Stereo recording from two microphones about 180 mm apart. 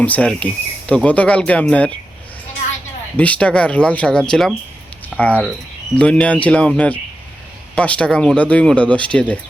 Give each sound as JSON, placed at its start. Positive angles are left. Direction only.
{"t": 0.0, "sound": "speech", "side_deg": 5}
{"t": 3.2, "sound": "speech", "side_deg": 5}